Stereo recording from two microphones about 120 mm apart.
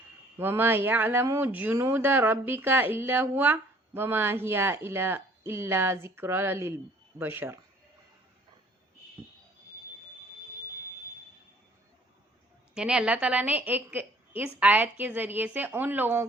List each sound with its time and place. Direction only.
0.3 s speech: 20° right (ahead or behind)
12.7 s a woman's voice: 5° right (ahead or behind)